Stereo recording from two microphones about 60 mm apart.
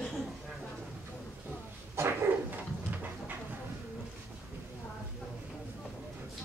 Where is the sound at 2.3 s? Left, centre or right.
Right.